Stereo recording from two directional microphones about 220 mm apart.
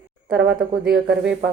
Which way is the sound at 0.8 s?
50° right (ahead or behind).